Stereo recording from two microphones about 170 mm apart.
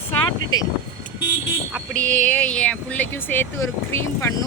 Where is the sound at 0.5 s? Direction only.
25° left (ahead or behind).